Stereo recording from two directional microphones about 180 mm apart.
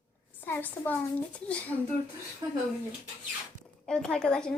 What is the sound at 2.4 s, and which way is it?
Speech, 20° right (ahead or behind).